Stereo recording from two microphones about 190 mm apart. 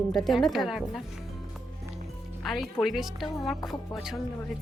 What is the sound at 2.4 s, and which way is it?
A woman's voice, centre (ahead or behind).